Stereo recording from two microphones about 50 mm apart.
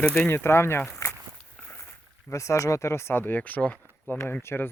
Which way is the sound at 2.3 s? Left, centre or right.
Left.